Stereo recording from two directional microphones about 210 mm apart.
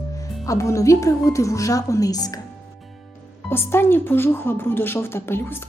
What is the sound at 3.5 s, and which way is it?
A woman's voice, 10° left (ahead or behind).